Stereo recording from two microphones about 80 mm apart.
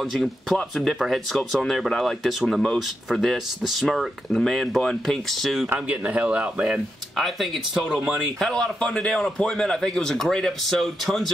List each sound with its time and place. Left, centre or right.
0.0 s speech: centre
5.9 s speech: centre
7.2 s speech: centre
8.4 s a man's voice: centre